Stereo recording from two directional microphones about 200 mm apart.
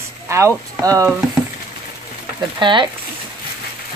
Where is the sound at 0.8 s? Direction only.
15° right (ahead or behind).